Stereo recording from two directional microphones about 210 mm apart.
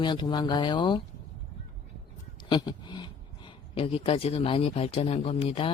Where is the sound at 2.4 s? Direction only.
20° left (ahead or behind).